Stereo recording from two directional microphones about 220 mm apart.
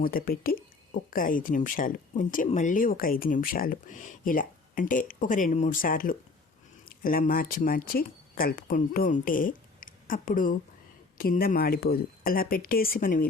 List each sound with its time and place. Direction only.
0.0 s speech: 40° left (ahead or behind)